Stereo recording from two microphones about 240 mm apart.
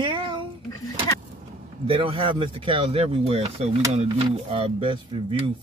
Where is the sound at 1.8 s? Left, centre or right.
Right.